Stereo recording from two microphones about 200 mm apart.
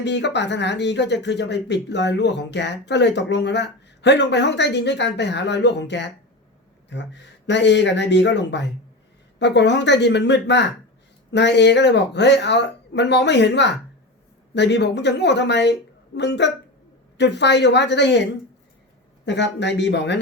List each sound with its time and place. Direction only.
0.0 s speech: 60° left (ahead or behind)
19.2 s speech: 60° left (ahead or behind)